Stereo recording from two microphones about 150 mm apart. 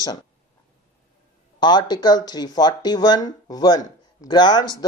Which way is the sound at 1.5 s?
30° left (ahead or behind).